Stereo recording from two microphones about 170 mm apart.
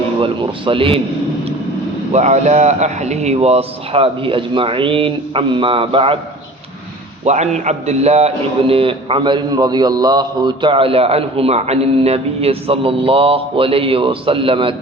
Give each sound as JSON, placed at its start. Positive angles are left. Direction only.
{"t": 0.2, "sound": "a man's voice", "side_deg": -30}
{"t": 2.1, "sound": "a man's voice", "side_deg": -45}
{"t": 7.3, "sound": "a man's voice", "side_deg": -40}